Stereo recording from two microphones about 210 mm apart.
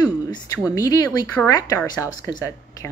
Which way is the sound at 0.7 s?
15° left (ahead or behind).